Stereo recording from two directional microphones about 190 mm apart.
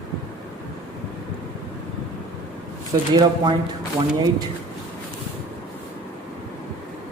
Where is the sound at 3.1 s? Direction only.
20° right (ahead or behind).